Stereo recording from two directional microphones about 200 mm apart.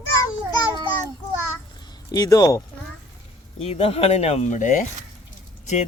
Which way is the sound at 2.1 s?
20° left (ahead or behind).